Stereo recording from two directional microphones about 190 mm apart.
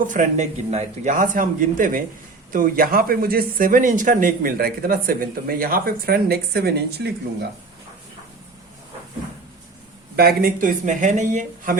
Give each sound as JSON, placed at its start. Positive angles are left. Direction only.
{"t": 0.0, "sound": "speech", "side_deg": -40}
{"t": 10.2, "sound": "speech", "side_deg": -55}